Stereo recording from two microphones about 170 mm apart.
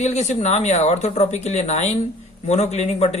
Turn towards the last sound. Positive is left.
turn(degrees=40)  # may be behind; listen again after turning